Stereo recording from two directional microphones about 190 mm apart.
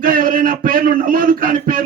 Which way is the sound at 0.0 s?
45° right (ahead or behind).